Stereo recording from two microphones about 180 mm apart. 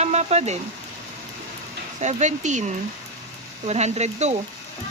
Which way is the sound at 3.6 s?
35° right (ahead or behind).